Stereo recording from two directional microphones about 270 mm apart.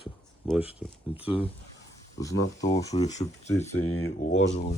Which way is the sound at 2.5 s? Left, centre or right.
Centre.